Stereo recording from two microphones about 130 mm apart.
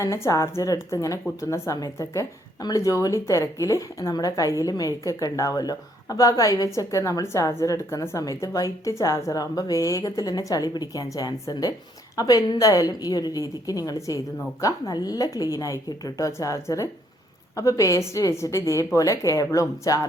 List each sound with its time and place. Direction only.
0.0 s a woman's voice: 25° left (ahead or behind)